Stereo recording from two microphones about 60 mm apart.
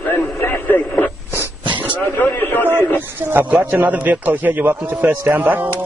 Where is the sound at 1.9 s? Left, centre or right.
Left.